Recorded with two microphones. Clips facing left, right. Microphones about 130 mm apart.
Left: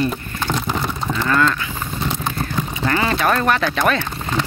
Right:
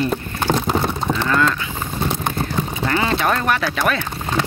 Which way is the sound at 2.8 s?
15° right (ahead or behind).